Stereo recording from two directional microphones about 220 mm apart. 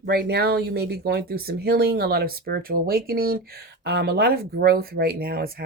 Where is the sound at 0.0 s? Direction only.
45° right (ahead or behind).